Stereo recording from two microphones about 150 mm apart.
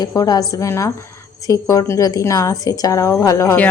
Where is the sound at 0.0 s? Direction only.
25° left (ahead or behind).